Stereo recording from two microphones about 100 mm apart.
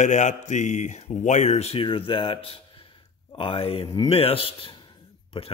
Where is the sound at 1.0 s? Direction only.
90° left.